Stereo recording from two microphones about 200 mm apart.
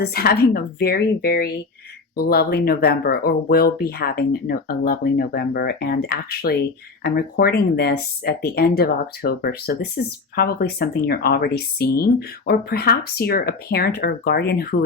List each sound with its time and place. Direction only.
0.0 s speech: 50° left (ahead or behind)